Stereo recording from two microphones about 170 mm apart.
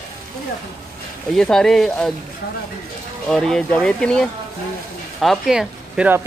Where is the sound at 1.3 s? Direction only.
5° left (ahead or behind).